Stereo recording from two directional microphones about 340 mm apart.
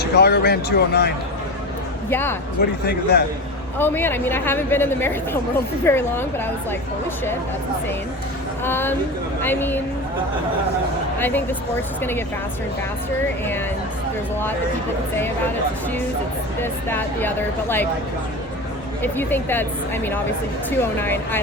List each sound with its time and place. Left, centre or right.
0.0 s speech: left
2.0 s speech: centre
2.6 s speech: left
3.8 s speech: centre
8.6 s speech: centre
11.2 s speech: centre
16.6 s speech: centre
19.0 s speech: centre
20.7 s speech: centre